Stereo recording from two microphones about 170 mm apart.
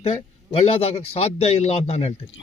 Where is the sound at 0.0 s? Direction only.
35° left (ahead or behind).